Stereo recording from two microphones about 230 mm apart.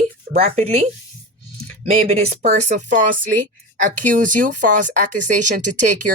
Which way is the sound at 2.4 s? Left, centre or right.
Right.